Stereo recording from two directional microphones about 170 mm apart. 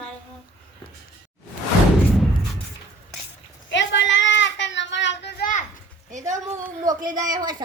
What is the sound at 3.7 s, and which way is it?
Child singing, 90° left.